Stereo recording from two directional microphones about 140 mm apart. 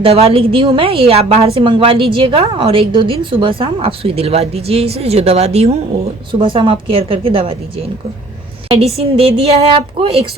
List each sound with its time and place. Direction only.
0.0 s a woman's voice: 45° right (ahead or behind)
6.4 s a woman's voice: 35° right (ahead or behind)
8.7 s a woman's voice: 45° right (ahead or behind)